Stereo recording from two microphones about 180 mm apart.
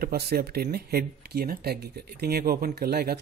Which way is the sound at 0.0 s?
60° right (ahead or behind).